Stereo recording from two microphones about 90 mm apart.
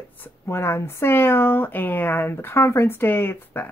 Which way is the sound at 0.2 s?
30° left (ahead or behind).